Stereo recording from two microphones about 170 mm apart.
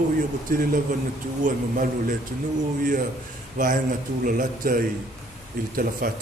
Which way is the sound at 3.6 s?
50° right (ahead or behind).